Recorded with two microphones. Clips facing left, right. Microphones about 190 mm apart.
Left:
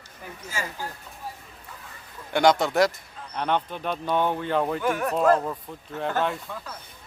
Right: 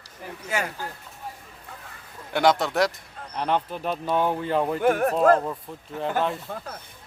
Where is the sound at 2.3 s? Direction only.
Centre (ahead or behind).